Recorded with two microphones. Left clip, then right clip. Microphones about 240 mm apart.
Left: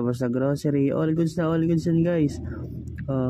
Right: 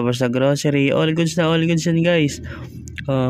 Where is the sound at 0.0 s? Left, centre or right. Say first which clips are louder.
Right 7 dB; right.